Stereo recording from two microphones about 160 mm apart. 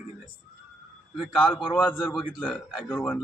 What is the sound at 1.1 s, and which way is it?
A man's voice, centre (ahead or behind).